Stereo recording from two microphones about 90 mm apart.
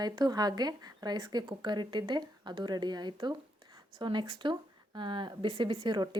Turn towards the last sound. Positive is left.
turn(degrees=-65)  # may be behind; listen again after turning